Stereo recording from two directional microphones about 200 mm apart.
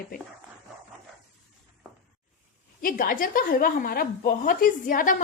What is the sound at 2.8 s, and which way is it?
A woman's voice, 45° left (ahead or behind).